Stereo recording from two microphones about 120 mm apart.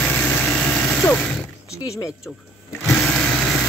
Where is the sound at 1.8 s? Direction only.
25° left (ahead or behind).